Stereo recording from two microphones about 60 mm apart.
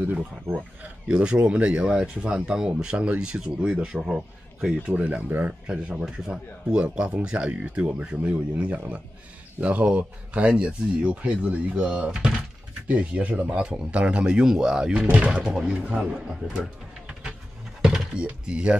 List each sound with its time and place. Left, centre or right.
0.0 s speech: right
12.8 s speech: right
17.8 s speech: centre